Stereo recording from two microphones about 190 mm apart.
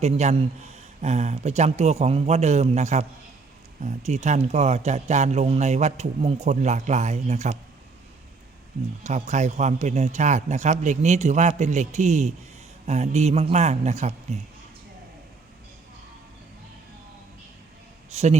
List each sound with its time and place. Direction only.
0.0 s speech: 35° right (ahead or behind)
9.0 s speech: 40° right (ahead or behind)
18.1 s a man's voice: 35° right (ahead or behind)